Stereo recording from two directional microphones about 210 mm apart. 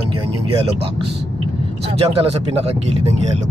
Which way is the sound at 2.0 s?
30° right (ahead or behind).